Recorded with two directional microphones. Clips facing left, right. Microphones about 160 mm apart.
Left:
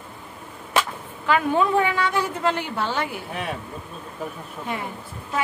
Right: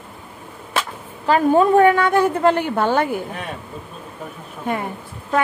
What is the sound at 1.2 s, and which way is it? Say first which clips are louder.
A woman's voice: right 6 dB; 40° right (ahead or behind).